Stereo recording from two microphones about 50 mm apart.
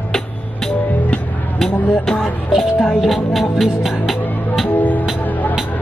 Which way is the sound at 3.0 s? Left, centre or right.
Centre.